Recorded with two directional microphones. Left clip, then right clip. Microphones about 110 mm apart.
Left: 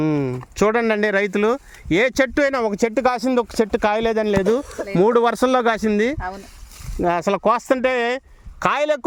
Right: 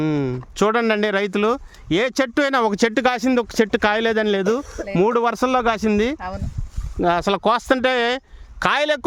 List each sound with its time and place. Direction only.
0.0 s speech: centre (ahead or behind)
2.5 s speech: 35° right (ahead or behind); by 4.4 s 20° right (ahead or behind)
5.0 s speech: 10° left (ahead or behind)
6.2 s speech: 45° right (ahead or behind)
7.0 s speech: 10° right (ahead or behind)